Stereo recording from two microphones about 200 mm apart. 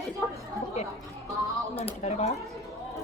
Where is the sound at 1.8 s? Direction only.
30° left (ahead or behind).